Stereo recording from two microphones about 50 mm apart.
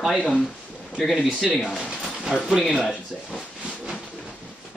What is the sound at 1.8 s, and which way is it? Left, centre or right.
Pigeon, centre.